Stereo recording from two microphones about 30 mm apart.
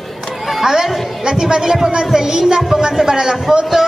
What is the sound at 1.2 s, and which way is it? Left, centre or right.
A man's voice, right.